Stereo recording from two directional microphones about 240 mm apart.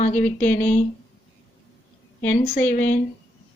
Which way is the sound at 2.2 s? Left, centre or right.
Left.